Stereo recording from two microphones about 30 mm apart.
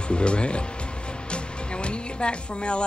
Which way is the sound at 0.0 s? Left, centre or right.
Left.